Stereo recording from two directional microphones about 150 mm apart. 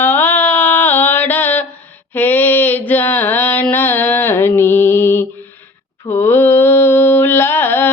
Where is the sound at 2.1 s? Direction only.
10° left (ahead or behind).